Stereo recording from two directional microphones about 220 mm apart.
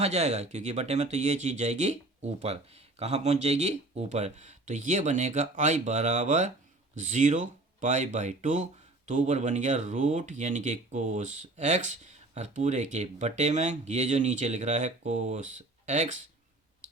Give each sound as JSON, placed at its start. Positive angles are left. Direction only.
{"t": 0.0, "sound": "speech", "side_deg": -30}